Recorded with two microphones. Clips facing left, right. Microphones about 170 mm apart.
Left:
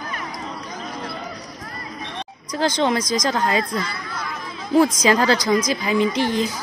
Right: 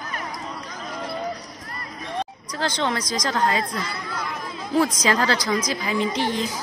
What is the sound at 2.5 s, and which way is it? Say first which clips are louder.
Speech: left 5 dB; 15° left (ahead or behind).